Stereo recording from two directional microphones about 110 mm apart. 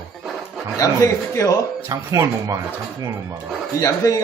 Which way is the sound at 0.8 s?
30° left (ahead or behind).